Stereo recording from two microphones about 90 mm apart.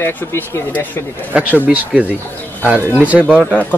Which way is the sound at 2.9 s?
15° right (ahead or behind).